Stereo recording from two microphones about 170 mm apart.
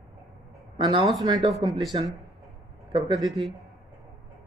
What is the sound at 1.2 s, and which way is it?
Speech, 25° right (ahead or behind).